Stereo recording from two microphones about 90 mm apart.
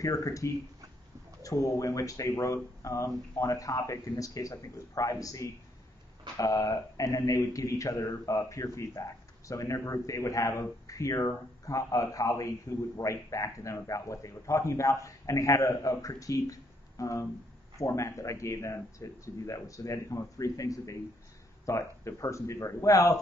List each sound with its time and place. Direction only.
0.0 s speech: 40° left (ahead or behind)